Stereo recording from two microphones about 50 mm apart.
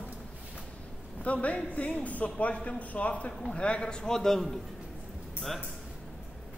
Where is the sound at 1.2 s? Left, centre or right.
Left; by 4.5 s centre.